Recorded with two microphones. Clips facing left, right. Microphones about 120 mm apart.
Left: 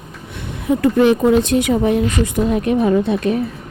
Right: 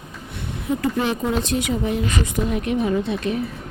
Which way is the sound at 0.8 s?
70° left (ahead or behind).